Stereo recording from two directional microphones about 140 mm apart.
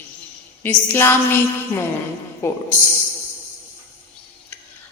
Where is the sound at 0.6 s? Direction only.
15° left (ahead or behind).